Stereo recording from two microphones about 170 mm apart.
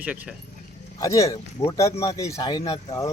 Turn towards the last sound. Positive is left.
turn(degrees=25)  # may be behind; listen again after turning